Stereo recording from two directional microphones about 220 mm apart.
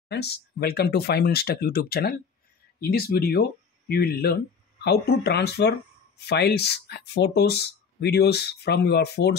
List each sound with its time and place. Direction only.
0.1 s speech: 50° left (ahead or behind)